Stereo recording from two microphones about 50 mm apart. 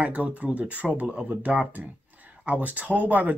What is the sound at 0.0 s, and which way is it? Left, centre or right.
Speech, right.